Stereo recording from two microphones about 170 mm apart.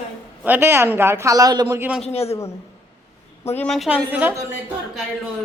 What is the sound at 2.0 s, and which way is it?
Speech, 35° left (ahead or behind).